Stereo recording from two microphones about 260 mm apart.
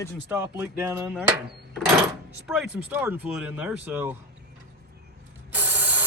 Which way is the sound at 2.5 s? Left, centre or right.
Centre.